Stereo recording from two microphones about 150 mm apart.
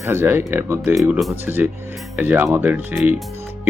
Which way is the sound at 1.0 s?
Centre (ahead or behind).